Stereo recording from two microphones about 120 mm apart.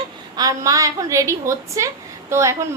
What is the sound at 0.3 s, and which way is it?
A woman's voice, 30° right (ahead or behind).